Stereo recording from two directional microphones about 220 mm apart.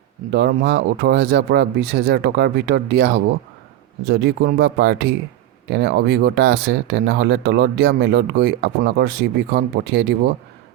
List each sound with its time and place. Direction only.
0.3 s speech: 50° right (ahead or behind)